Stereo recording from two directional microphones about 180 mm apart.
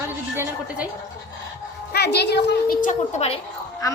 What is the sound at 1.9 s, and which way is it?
Speech, 65° left (ahead or behind).